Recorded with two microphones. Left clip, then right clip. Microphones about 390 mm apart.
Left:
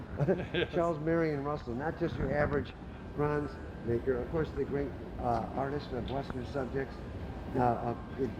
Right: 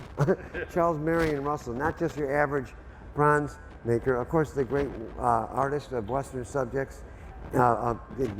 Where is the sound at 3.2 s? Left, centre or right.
Right.